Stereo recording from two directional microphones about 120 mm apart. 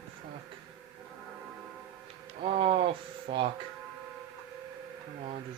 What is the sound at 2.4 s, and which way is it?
A man's voice, 55° right (ahead or behind).